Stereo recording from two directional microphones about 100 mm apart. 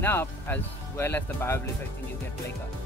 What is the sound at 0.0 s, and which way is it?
Speech, 20° left (ahead or behind).